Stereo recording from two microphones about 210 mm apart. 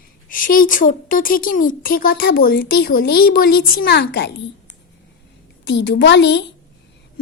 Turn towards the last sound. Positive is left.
turn(degrees=55)  # may be behind; listen again after turning